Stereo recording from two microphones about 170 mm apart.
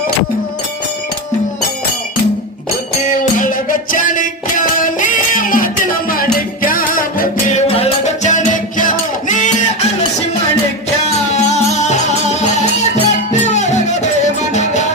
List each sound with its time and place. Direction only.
3.1 s music: 50° left (ahead or behind)
7.7 s music: 35° left (ahead or behind)
11.3 s music: 40° left (ahead or behind)